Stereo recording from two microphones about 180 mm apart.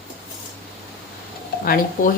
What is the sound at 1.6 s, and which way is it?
Speech, 55° left (ahead or behind).